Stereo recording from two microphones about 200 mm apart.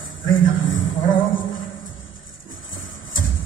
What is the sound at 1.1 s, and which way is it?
Music, 75° left (ahead or behind).